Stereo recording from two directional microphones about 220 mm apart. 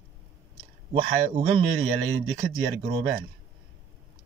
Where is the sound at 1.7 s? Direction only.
60° right (ahead or behind).